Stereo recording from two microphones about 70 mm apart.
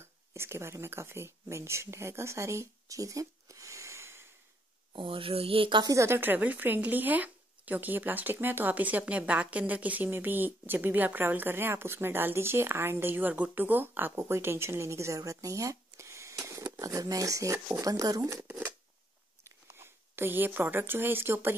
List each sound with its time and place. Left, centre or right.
0.0 s speech: right
5.9 s speech: right
16.8 s speech: right
18.4 s shuffling cards: right
19.4 s speech: right